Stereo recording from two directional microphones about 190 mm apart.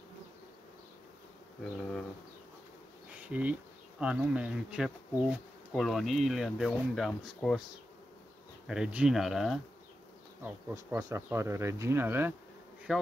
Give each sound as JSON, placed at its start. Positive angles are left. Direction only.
{"t": 3.2, "sound": "speech", "side_deg": -5}
{"t": 8.6, "sound": "speech", "side_deg": -5}
{"t": 10.4, "sound": "speech", "side_deg": -15}